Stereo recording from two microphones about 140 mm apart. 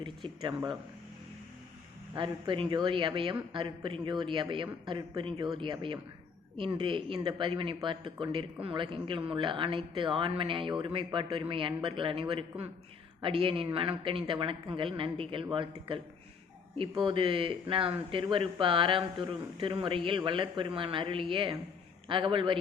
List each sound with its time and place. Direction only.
0.0 s a man's voice: 35° right (ahead or behind)
2.1 s a man's voice: 35° right (ahead or behind)